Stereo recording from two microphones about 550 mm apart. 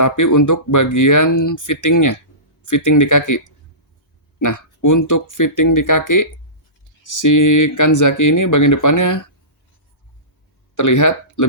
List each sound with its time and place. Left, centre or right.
0.0 s speech: left
10.8 s speech: left